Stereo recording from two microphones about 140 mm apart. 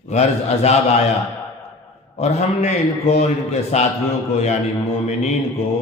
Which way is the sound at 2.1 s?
50° left (ahead or behind).